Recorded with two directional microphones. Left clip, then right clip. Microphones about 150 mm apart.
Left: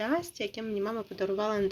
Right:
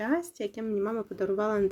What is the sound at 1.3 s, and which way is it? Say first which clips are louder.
Speech: right 2 dB; 25° right (ahead or behind).